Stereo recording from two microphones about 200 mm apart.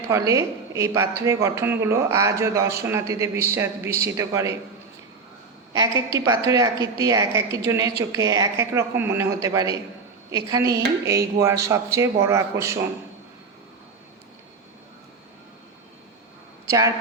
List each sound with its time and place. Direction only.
0.1 s speech: 15° right (ahead or behind)
5.7 s speech: 15° right (ahead or behind)
16.6 s a woman's voice: 15° right (ahead or behind)